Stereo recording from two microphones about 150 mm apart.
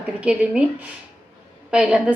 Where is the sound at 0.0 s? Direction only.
10° right (ahead or behind).